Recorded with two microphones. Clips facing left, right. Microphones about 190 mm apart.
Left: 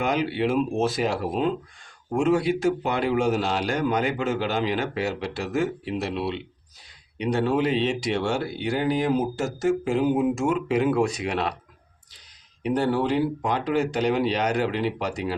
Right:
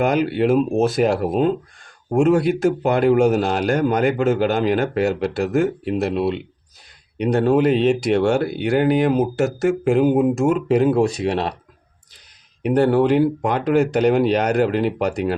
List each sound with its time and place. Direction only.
0.0 s speech: 50° right (ahead or behind)
12.6 s speech: 60° right (ahead or behind)